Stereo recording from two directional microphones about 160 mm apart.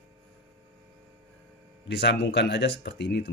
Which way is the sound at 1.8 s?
90° left.